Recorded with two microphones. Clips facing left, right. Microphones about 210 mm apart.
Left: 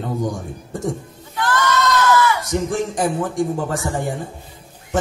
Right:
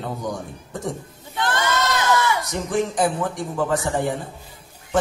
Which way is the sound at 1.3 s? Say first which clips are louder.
Left 3 dB; 25° right (ahead or behind).